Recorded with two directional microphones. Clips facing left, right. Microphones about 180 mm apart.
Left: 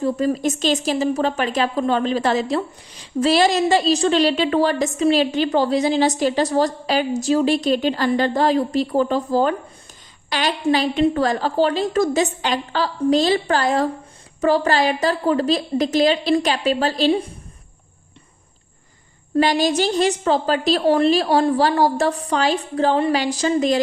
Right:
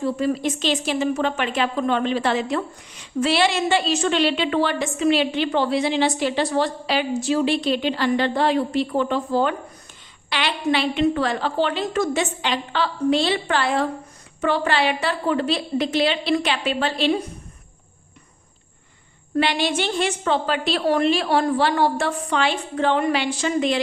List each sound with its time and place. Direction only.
0.0 s a woman's voice: 40° left (ahead or behind)
19.4 s speech: 40° left (ahead or behind)